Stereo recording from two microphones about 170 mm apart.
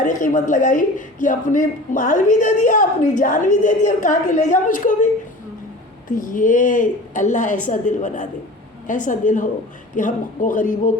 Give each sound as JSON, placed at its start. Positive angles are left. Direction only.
{"t": 0.0, "sound": "speech", "side_deg": 50}
{"t": 6.1, "sound": "speech", "side_deg": 50}